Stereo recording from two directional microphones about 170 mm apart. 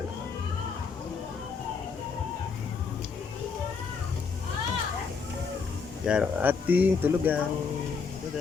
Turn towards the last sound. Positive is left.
turn(degrees=-10)  # may be behind; listen again after turning